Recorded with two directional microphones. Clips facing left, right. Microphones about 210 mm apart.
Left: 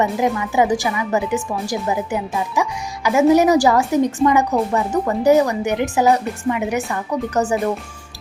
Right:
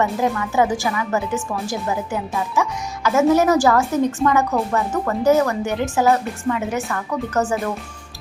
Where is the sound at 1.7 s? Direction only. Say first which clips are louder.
Left 3 dB; 15° left (ahead or behind).